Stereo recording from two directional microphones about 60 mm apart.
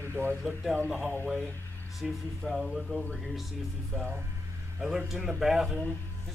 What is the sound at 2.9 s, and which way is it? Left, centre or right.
Speech, centre.